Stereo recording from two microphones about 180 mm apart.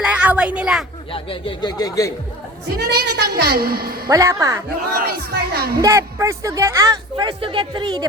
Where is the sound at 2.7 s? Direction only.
60° right (ahead or behind).